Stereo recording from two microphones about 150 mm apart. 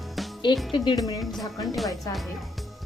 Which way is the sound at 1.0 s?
25° left (ahead or behind).